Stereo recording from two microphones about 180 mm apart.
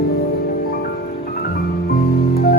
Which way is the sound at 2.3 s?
60° left (ahead or behind).